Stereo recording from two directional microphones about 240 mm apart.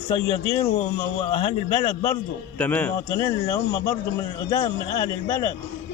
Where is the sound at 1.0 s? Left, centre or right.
Left.